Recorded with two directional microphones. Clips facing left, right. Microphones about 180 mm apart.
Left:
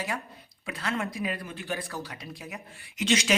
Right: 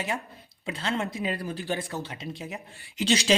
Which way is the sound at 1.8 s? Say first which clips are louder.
Right 3 dB; 25° right (ahead or behind).